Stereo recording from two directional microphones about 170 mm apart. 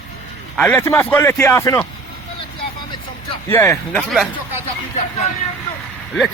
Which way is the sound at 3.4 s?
15° left (ahead or behind).